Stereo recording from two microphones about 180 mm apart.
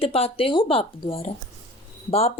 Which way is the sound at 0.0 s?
30° left (ahead or behind).